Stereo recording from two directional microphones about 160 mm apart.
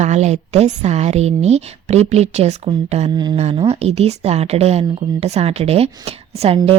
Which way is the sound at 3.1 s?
25° right (ahead or behind).